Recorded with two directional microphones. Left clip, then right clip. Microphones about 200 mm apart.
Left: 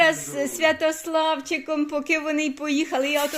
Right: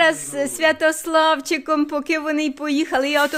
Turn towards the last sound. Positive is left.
turn(degrees=-35)  # may be behind; listen again after turning